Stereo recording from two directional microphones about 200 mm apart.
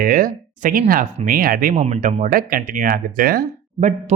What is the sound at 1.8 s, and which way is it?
Speech, 35° right (ahead or behind).